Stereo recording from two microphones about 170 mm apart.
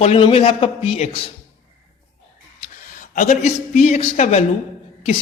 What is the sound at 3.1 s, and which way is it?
A man's voice, 45° left (ahead or behind).